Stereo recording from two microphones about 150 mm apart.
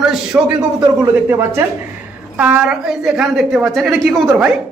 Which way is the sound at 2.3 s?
10° right (ahead or behind).